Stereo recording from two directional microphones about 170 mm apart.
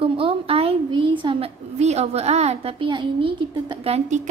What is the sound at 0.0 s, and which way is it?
A woman's voice, 30° right (ahead or behind).